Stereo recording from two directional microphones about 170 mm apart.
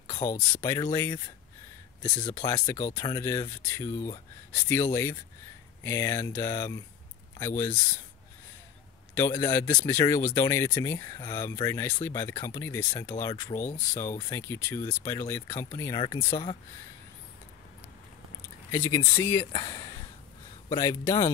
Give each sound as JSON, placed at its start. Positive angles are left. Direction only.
{"t": 0.0, "sound": "speech", "side_deg": 15}
{"t": 9.1, "sound": "speech", "side_deg": 15}
{"t": 18.7, "sound": "speech", "side_deg": 20}